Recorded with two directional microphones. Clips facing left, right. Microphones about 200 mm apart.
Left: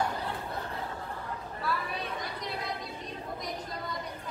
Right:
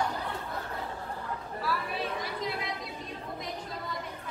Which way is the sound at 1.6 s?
Centre (ahead or behind).